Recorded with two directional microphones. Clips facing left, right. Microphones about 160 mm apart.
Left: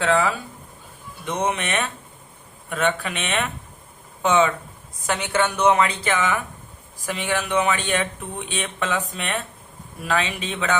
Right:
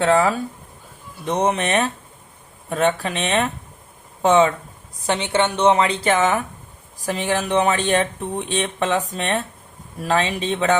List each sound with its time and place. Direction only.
0.0 s a woman's voice: 35° right (ahead or behind)